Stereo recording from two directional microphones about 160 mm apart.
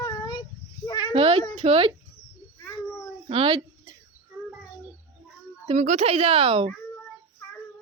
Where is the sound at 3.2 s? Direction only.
35° right (ahead or behind).